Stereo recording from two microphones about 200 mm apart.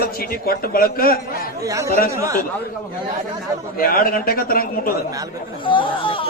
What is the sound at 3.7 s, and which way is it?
A man's voice, 45° left (ahead or behind).